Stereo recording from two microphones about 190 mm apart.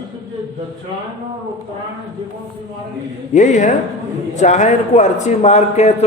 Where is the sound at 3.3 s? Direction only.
40° left (ahead or behind).